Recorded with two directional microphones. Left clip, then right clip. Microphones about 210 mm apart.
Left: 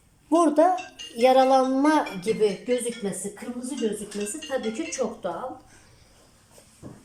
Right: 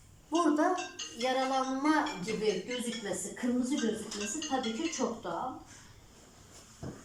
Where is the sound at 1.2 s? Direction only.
50° left (ahead or behind).